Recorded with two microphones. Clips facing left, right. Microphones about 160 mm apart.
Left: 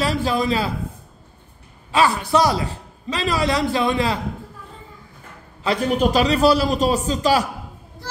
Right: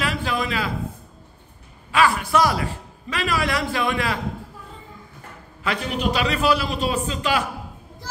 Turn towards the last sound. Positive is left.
turn(degrees=35)  # may be behind; listen again after turning